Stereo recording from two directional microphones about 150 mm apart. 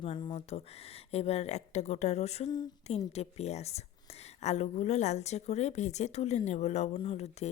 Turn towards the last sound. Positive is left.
turn(degrees=40)  # may be behind; listen again after turning